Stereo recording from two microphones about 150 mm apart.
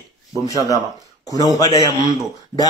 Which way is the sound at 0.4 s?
20° left (ahead or behind).